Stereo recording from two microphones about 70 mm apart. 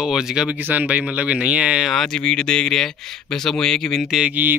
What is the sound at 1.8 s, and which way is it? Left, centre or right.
Speech, centre.